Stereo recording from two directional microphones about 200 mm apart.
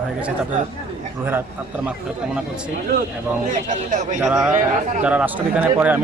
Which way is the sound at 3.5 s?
40° right (ahead or behind).